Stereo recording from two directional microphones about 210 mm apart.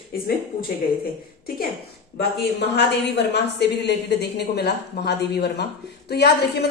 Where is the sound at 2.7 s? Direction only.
55° left (ahead or behind).